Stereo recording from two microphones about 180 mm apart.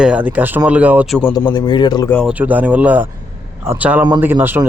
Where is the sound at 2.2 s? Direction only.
10° right (ahead or behind).